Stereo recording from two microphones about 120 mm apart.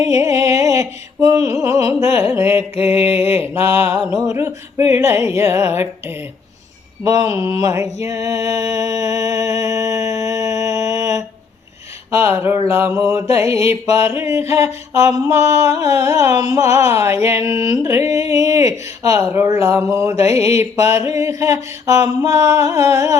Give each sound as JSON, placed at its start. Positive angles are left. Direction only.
{"t": 0.0, "sound": "music", "side_deg": -25}
{"t": 2.1, "sound": "a sound", "side_deg": -20}
{"t": 3.3, "sound": "music", "side_deg": -20}
{"t": 7.0, "sound": "music", "side_deg": -30}